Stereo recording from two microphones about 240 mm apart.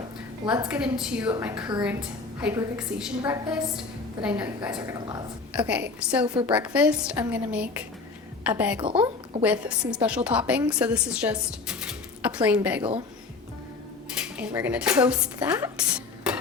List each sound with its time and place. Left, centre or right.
0.7 s a woman's voice: centre
4.9 s a woman's voice: centre
5.5 s speech: centre
8.8 s speech: right
9.4 s speech: centre
14.1 s speech: centre
15.4 s a woman's voice: centre
15.9 s a sound: centre